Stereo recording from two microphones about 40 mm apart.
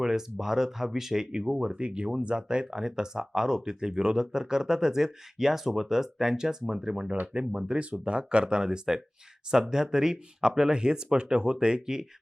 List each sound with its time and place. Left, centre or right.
0.0 s speech: centre